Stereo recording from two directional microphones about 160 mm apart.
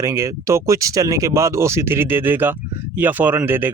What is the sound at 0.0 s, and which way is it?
Speech, 15° right (ahead or behind).